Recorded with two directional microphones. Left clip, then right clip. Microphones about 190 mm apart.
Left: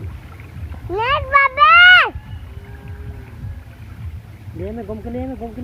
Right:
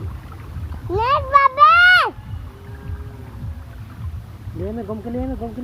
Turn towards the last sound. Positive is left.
turn(degrees=5)  # may be behind; listen again after turning